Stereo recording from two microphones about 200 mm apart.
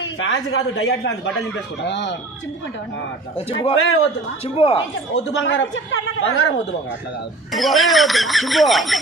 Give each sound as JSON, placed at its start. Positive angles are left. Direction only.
{"t": 0.0, "sound": "a man's voice", "side_deg": 85}
{"t": 1.9, "sound": "speech", "side_deg": 65}
{"t": 3.3, "sound": "a man's voice", "side_deg": 30}
{"t": 5.1, "sound": "a man's voice", "side_deg": 65}
{"t": 7.5, "sound": "speech", "side_deg": 0}